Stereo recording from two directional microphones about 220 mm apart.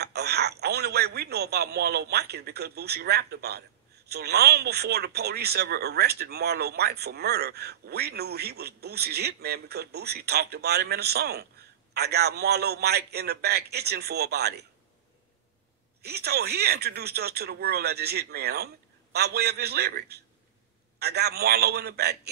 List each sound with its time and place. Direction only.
0.0 s speech: 50° right (ahead or behind)
16.0 s speech: 45° right (ahead or behind)